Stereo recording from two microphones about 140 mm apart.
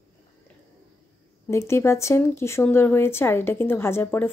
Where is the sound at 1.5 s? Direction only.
20° left (ahead or behind).